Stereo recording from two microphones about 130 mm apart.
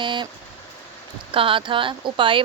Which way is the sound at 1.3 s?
40° right (ahead or behind).